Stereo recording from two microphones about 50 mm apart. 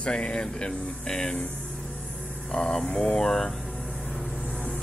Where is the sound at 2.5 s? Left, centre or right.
Centre.